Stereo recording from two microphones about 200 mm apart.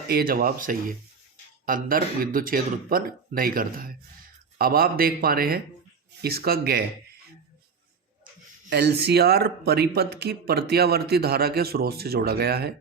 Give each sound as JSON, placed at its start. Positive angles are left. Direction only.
{"t": 0.1, "sound": "speech", "side_deg": -50}
{"t": 8.7, "sound": "speech", "side_deg": -55}